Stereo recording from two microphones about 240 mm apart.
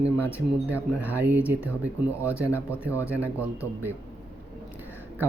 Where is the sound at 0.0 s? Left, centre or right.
Centre.